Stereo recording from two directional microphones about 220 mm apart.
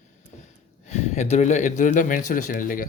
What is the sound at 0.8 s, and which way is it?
Speech, 30° left (ahead or behind).